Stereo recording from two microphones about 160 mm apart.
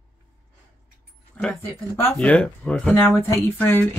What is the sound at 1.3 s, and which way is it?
Speech, 10° left (ahead or behind).